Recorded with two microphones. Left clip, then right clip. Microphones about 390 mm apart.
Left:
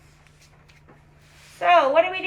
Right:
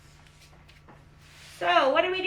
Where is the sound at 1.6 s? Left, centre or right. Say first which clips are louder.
Left 5 dB; centre.